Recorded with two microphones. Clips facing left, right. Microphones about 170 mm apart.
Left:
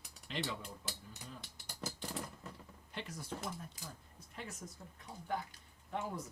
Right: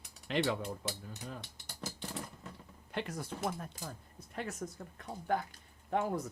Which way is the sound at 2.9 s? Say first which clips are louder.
Right 6 dB; 65° right (ahead or behind).